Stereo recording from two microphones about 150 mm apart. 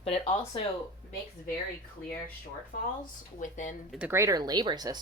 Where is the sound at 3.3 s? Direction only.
55° left (ahead or behind).